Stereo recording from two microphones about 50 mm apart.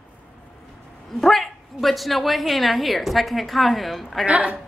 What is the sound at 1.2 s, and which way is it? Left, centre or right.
Speech, centre.